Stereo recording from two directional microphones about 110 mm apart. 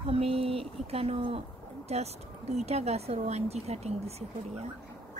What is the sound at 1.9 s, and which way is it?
Speech, 80° right.